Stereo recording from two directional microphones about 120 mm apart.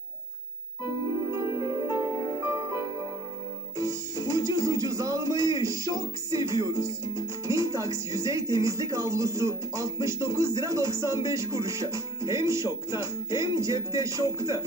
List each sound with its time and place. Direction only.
1.3 s music: 25° right (ahead or behind)
3.8 s speech: 30° right (ahead or behind)